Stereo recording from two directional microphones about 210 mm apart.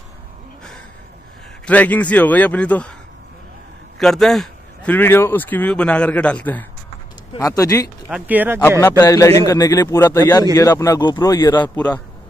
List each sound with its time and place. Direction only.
1.7 s a man's voice: 5° left (ahead or behind)
4.0 s a man's voice: centre (ahead or behind)
8.1 s speech: 10° right (ahead or behind)
8.5 s a man's voice: 10° left (ahead or behind)